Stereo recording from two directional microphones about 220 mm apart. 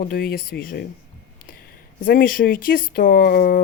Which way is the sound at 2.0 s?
40° left (ahead or behind).